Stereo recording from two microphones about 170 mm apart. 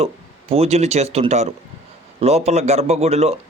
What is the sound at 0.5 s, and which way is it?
A man's voice, 35° right (ahead or behind).